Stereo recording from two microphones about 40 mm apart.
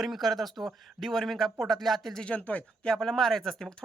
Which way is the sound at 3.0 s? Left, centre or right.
Centre.